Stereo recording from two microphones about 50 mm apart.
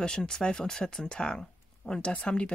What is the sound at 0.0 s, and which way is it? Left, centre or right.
Speech, centre.